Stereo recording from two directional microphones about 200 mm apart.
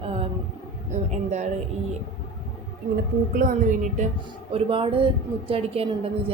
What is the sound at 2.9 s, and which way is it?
Speech, 45° right (ahead or behind).